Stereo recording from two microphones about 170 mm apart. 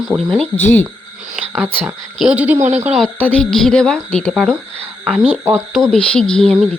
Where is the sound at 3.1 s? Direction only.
10° left (ahead or behind).